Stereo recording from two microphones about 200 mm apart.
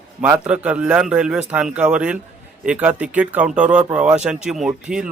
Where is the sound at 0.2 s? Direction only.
5° right (ahead or behind).